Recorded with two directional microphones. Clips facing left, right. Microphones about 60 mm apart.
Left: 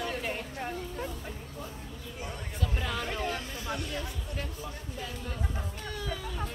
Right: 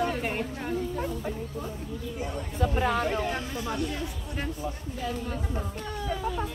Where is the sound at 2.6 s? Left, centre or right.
Right.